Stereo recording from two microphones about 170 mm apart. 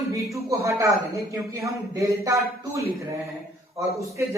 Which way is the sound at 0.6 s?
20° right (ahead or behind).